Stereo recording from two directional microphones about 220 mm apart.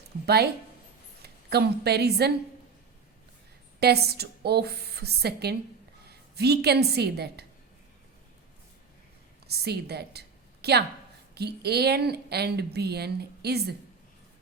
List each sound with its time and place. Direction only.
0.3 s a woman's voice: 45° right (ahead or behind)
3.8 s a woman's voice: 45° right (ahead or behind)
9.5 s a woman's voice: 45° right (ahead or behind)